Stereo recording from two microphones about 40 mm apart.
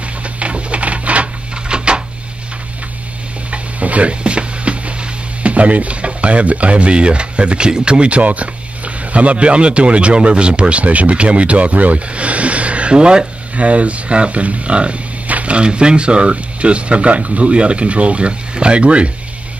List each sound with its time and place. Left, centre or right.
0.2 s printer: right
1.7 s a sound: right
3.4 s music: right
5.4 s speech: right
13.6 s speech: right